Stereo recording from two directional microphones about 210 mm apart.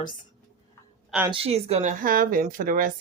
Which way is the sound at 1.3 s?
30° right (ahead or behind).